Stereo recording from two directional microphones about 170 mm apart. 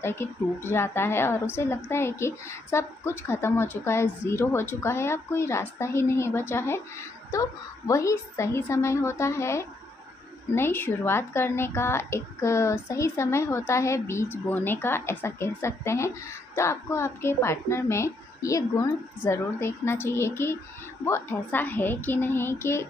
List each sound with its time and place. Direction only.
0.0 s a woman's voice: 15° left (ahead or behind)